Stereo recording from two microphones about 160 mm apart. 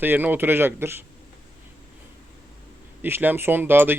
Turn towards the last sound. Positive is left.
turn(degrees=-15)  # may be behind; listen again after turning